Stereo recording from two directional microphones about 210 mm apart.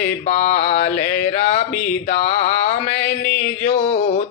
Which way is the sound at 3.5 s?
30° left (ahead or behind).